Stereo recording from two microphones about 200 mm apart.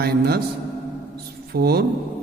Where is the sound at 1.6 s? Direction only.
50° right (ahead or behind).